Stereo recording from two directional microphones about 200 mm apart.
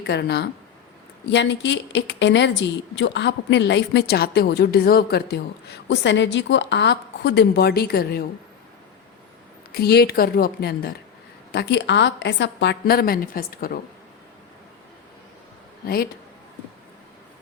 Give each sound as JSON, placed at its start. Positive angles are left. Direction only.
{"t": 0.0, "sound": "a woman's voice", "side_deg": 55}
{"t": 9.7, "sound": "a woman's voice", "side_deg": 50}